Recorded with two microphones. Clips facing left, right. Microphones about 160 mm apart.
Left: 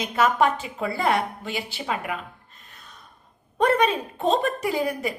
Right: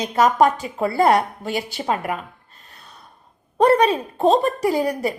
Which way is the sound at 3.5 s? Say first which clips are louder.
Right 5 dB; 35° right (ahead or behind).